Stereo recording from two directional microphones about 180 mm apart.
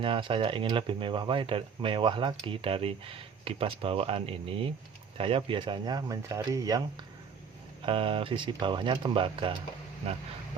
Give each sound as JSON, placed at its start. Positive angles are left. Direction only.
{"t": 0.0, "sound": "speech", "side_deg": -30}
{"t": 7.9, "sound": "speech", "side_deg": -30}